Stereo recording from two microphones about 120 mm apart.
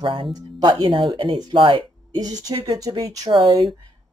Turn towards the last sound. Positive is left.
turn(degrees=-40)  # may be behind; listen again after turning